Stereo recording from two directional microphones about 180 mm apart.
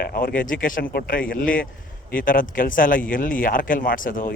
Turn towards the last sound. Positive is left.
turn(degrees=50)  # may be behind; listen again after turning